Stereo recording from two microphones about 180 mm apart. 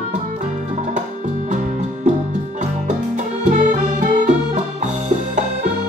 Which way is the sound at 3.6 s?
45° right (ahead or behind).